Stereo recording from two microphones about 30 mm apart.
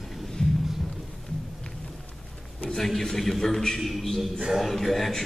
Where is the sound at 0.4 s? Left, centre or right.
Left.